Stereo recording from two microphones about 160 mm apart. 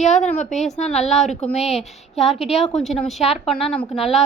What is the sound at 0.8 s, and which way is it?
A woman's voice, 45° left (ahead or behind).